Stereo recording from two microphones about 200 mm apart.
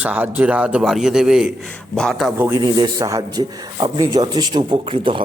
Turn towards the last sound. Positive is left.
turn(degrees=-25)  # may be behind; listen again after turning